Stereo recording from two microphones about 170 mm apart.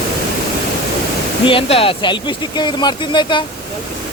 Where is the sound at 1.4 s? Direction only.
30° left (ahead or behind).